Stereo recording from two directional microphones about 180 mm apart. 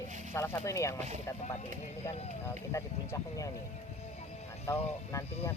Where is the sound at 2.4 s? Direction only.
15° left (ahead or behind).